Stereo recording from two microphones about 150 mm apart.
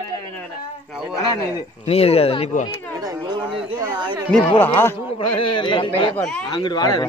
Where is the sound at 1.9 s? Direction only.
40° left (ahead or behind).